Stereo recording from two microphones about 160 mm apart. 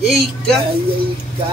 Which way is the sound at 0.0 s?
Centre (ahead or behind).